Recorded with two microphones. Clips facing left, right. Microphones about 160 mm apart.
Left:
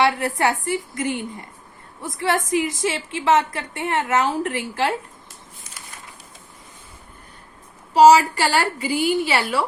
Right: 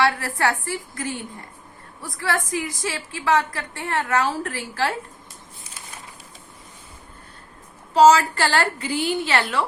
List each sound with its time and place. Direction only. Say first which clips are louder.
0.0 s a woman's voice: left 2 dB; 20° left (ahead or behind)
7.9 s a woman's voice: left 2 dB; 10° left (ahead or behind)